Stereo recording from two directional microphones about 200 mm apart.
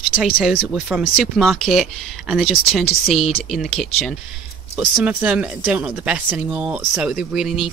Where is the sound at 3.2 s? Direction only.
30° left (ahead or behind).